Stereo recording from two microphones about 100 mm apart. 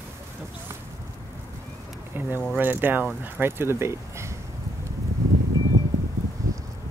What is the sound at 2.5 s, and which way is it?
Speech, 20° right (ahead or behind).